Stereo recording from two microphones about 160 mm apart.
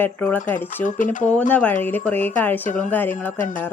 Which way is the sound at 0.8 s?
55° left (ahead or behind).